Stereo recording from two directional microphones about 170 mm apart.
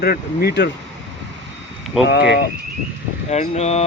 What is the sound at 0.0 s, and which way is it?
Speech, 65° left (ahead or behind).